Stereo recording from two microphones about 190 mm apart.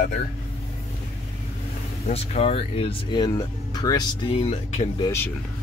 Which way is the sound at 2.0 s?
35° left (ahead or behind).